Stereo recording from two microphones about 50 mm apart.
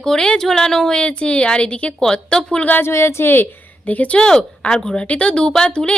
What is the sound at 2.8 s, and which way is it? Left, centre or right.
Speech, left.